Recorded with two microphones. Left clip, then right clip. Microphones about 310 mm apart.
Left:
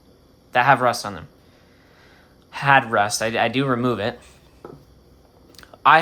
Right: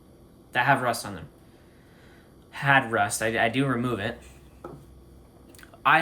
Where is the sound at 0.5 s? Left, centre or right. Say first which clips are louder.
Left 6 dB; centre.